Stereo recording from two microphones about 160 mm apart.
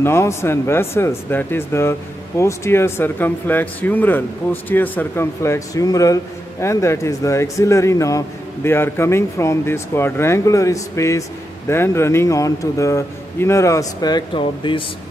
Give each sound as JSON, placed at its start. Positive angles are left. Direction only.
{"t": 0.0, "sound": "speech", "side_deg": 15}